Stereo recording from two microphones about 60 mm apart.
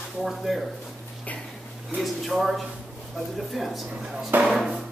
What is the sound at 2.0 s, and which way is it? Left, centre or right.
Speech, centre.